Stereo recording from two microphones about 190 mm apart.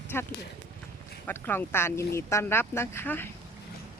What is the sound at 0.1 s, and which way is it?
Speech, 10° left (ahead or behind).